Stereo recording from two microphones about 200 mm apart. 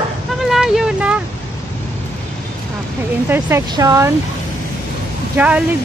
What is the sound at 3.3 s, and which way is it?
Speech, 15° right (ahead or behind).